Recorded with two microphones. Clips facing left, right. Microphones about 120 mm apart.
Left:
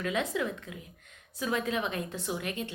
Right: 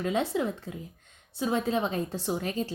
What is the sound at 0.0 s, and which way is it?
A woman's voice, 30° right (ahead or behind).